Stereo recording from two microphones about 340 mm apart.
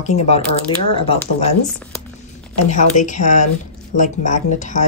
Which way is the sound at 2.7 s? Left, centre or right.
Left.